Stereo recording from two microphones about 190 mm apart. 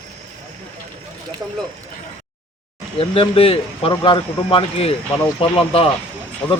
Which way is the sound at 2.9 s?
30° left (ahead or behind).